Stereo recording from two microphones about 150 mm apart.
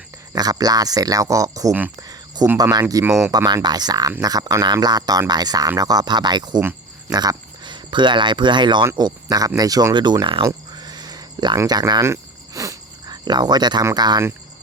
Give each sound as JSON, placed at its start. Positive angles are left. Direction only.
{"t": 0.3, "sound": "speech", "side_deg": -25}
{"t": 2.0, "sound": "a sound", "side_deg": -25}
{"t": 2.6, "sound": "speech", "side_deg": -25}